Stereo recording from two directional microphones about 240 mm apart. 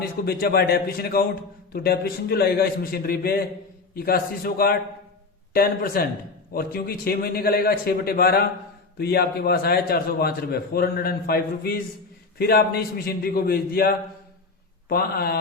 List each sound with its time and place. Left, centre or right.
0.0 s a man's voice: left